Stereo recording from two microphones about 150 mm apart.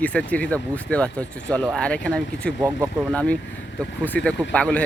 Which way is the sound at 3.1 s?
10° left (ahead or behind).